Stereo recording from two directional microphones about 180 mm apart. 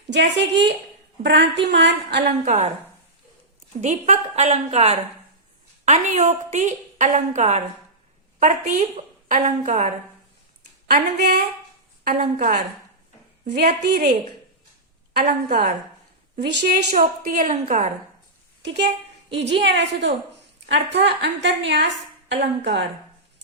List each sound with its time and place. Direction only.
0.1 s a woman's voice: 75° right (ahead or behind)
2.4 s a woman's voice: 40° right (ahead or behind)
3.8 s a woman's voice: 40° right (ahead or behind)
10.8 s speech: 55° right (ahead or behind)
13.4 s a woman's voice: 45° right (ahead or behind)
13.8 s speech: 60° right (ahead or behind)
15.2 s a woman's voice: 50° right (ahead or behind)
16.4 s a woman's voice: 70° right (ahead or behind)
16.6 s a woman's voice: 50° right (ahead or behind)
19.4 s a woman's voice: 75° right (ahead or behind)